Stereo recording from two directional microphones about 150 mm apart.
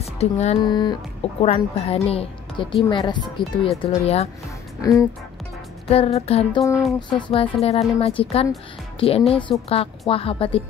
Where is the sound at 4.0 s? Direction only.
45° left (ahead or behind).